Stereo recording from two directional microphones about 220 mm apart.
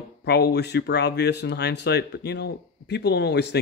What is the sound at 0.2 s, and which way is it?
Speech, 45° left (ahead or behind).